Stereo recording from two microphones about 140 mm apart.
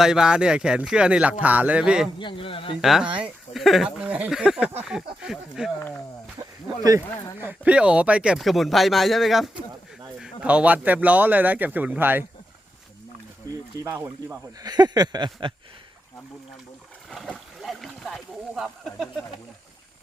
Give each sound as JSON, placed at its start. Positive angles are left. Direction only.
{"t": 0.0, "sound": "speech", "side_deg": -5}
{"t": 2.1, "sound": "a man's voice", "side_deg": 40}
{"t": 2.8, "sound": "speech", "side_deg": 0}
{"t": 7.4, "sound": "speech", "side_deg": -10}
{"t": 13.8, "sound": "speech", "side_deg": -15}
{"t": 14.6, "sound": "a sound", "side_deg": -30}
{"t": 17.1, "sound": "boat", "side_deg": 5}